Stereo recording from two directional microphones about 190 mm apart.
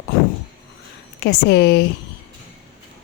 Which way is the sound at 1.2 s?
60° left (ahead or behind).